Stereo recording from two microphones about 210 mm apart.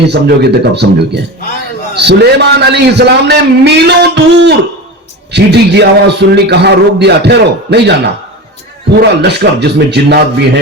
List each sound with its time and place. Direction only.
0.1 s a man's voice: 50° right (ahead or behind)
9.0 s a man's voice: 50° right (ahead or behind)